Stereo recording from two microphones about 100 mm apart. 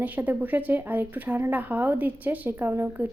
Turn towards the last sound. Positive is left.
turn(degrees=-20)  # may be behind; listen again after turning